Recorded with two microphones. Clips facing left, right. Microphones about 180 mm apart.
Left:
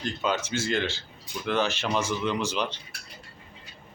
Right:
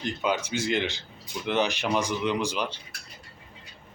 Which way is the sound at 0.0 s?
10° right (ahead or behind).